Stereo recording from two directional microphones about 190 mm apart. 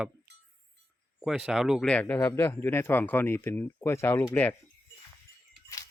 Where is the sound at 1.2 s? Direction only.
5° right (ahead or behind).